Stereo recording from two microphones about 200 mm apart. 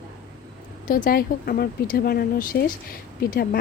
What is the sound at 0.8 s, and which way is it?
Speech, 45° left (ahead or behind).